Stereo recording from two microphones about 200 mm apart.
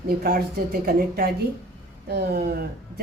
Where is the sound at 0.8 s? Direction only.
50° right (ahead or behind).